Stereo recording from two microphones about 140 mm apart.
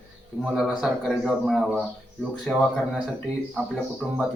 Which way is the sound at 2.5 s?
10° left (ahead or behind).